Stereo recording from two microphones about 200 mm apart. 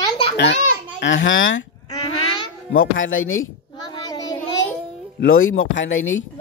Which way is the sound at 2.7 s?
65° left (ahead or behind).